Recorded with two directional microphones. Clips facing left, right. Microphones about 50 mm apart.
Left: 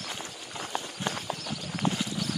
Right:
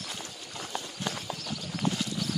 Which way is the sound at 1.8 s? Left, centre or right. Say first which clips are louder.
Left 1 dB; left.